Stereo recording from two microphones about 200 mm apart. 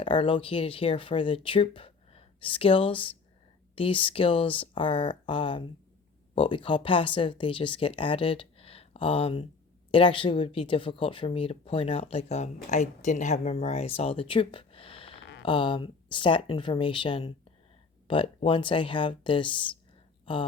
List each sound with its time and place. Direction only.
0.0 s speech: 25° left (ahead or behind)
15.2 s a sound: 65° left (ahead or behind)
15.4 s speech: 25° left (ahead or behind)